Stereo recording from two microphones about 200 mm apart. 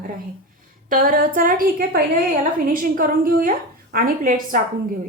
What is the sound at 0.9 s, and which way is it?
A woman's voice, 45° right (ahead or behind).